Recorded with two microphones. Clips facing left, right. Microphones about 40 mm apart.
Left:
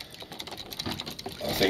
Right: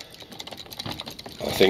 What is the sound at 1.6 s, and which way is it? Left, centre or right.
Speech, right.